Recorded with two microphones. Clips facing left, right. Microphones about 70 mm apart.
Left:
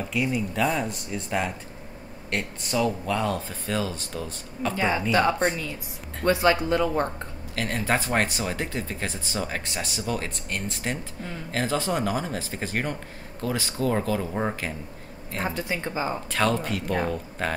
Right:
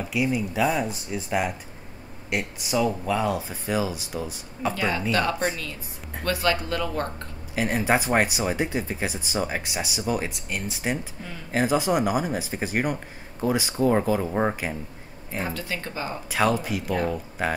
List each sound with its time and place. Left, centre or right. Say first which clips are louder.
0.1 s speech: right 2 dB; centre
4.7 s speech: left 3 dB; centre
6.2 s speech: left 4 dB; left
7.5 s speech: right 3 dB; centre
15.4 s speech: left 4 dB; centre
16.3 s speech: right 4 dB; centre